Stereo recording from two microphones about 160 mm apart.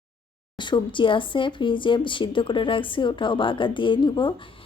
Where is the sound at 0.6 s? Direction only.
30° left (ahead or behind).